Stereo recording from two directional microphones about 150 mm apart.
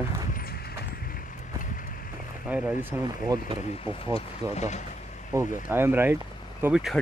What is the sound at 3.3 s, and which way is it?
Speech, 25° right (ahead or behind).